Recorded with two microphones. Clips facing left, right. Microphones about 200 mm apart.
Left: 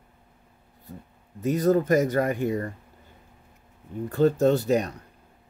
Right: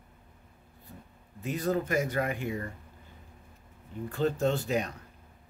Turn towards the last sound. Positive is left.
turn(degrees=40)  # may be behind; listen again after turning